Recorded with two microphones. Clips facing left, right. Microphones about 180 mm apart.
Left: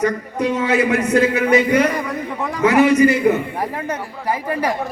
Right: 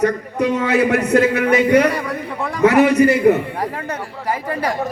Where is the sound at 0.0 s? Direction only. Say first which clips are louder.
Right 2 dB; 65° right (ahead or behind).